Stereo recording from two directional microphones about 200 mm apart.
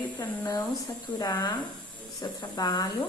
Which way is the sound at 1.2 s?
20° left (ahead or behind).